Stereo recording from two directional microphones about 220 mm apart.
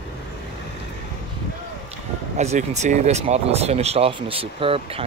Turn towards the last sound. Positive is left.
turn(degrees=-25)  # may be behind; listen again after turning